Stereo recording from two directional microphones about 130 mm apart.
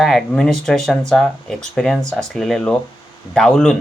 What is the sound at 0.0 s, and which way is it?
Speech, centre (ahead or behind).